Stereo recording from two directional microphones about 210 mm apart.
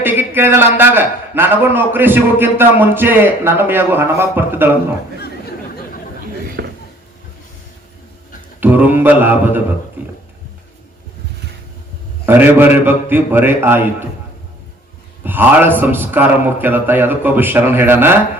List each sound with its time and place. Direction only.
0.0 s a sound: 10° right (ahead or behind)
0.8 s a man's voice: 10° right (ahead or behind)
6.6 s a sound: 55° right (ahead or behind)
8.6 s a man's voice: 10° right (ahead or behind)
12.2 s a man's voice: 10° right (ahead or behind)
15.2 s a man's voice: 10° right (ahead or behind)